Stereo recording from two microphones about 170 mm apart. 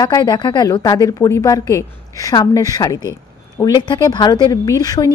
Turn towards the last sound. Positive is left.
turn(degrees=20)  # may be behind; listen again after turning